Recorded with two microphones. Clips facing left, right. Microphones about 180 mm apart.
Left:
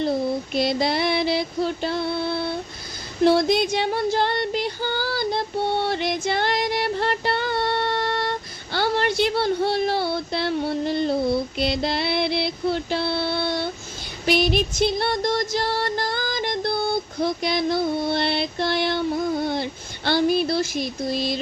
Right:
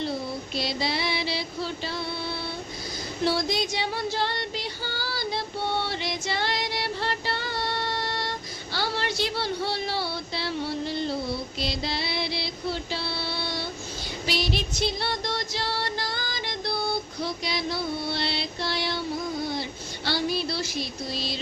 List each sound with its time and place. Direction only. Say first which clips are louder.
0.5 s female singing: left 6 dB; 55° left (ahead or behind)
11.5 s music: left 7 dB; 60° left (ahead or behind)
20.1 s a sound: left 8 dB; 55° left (ahead or behind)